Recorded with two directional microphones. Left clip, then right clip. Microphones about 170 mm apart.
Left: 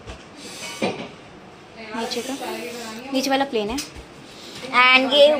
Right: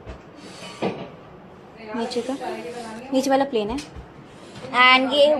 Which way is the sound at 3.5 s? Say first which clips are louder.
Even; 15° right (ahead or behind).